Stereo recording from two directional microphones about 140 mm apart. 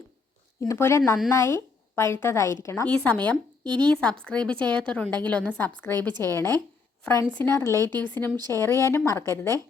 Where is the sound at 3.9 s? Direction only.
5° left (ahead or behind).